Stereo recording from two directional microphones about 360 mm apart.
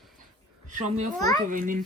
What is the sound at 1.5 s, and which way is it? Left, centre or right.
Speech, right.